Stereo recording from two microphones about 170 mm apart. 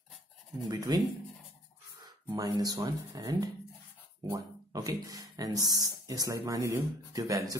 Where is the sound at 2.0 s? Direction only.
25° right (ahead or behind).